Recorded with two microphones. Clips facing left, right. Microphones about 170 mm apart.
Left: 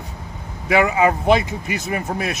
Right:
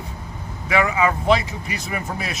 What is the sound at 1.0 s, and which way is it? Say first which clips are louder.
Speech: left 3 dB; 50° left (ahead or behind).